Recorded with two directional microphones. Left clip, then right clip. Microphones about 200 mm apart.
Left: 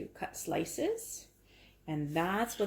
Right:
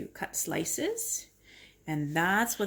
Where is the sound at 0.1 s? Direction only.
35° right (ahead or behind).